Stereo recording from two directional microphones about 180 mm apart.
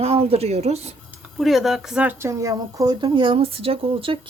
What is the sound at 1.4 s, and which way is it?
Speech, centre (ahead or behind).